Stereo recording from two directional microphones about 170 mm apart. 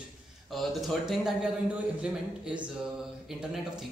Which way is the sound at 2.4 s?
5° right (ahead or behind).